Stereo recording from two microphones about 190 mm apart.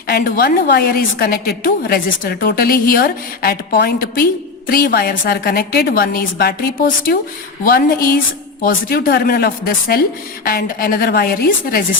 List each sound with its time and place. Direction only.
0.1 s a woman's voice: 55° left (ahead or behind)